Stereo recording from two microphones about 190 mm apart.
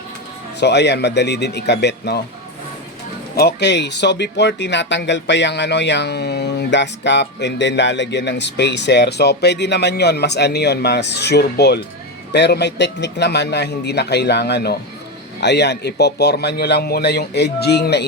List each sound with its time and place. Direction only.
0.6 s speech: 65° left (ahead or behind)
3.3 s speech: 60° left (ahead or behind)